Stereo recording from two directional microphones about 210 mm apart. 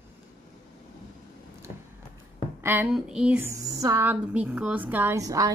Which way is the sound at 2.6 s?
10° right (ahead or behind).